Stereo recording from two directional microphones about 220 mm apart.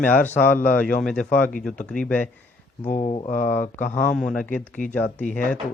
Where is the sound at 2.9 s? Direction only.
30° left (ahead or behind).